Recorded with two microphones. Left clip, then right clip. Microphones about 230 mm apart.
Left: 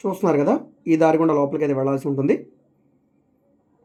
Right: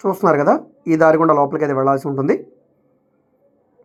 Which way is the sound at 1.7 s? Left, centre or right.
Centre.